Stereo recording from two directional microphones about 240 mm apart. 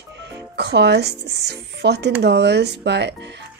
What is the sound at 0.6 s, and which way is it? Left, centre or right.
Music, right.